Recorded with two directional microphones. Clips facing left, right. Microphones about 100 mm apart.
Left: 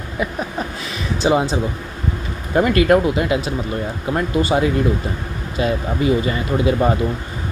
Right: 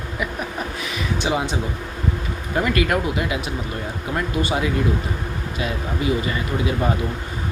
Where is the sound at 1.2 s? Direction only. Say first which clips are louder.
Left 7 dB; 35° left (ahead or behind).